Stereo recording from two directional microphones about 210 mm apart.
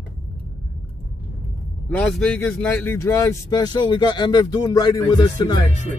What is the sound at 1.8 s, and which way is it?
A man's voice, 5° left (ahead or behind).